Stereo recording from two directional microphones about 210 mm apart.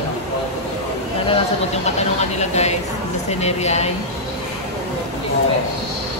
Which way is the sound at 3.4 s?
30° left (ahead or behind).